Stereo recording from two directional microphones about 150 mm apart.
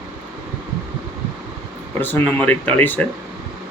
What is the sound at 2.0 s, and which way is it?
Speech, 10° left (ahead or behind).